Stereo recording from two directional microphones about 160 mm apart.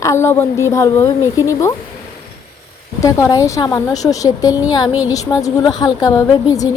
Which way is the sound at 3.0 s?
20° left (ahead or behind).